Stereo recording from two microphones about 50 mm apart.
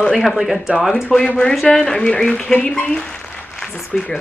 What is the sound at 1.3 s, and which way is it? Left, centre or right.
Speech, left.